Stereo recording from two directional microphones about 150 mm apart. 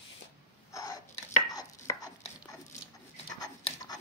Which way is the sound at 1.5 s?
25° left (ahead or behind).